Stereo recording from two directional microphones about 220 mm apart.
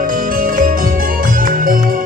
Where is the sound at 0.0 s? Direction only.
40° right (ahead or behind).